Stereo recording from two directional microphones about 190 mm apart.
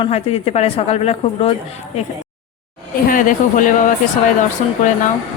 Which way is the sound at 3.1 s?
45° left (ahead or behind).